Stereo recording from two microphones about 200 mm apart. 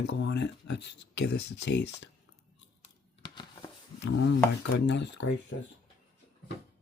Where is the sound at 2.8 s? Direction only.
20° left (ahead or behind).